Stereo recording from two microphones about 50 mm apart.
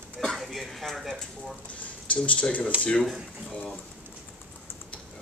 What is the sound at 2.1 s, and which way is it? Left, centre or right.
Speech, left.